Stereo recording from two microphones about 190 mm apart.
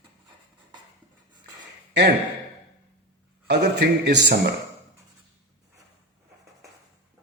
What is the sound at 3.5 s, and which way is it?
Speech, 60° right (ahead or behind).